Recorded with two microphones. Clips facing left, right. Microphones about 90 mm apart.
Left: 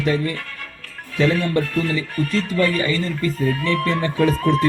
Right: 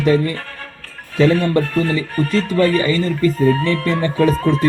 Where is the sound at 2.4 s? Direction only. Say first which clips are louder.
Right 6 dB; 75° right (ahead or behind).